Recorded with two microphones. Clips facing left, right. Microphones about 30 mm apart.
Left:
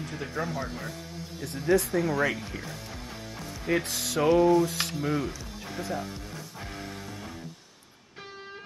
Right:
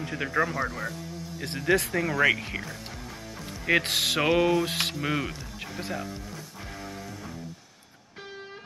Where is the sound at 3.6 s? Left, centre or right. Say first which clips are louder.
Right 5 dB; right.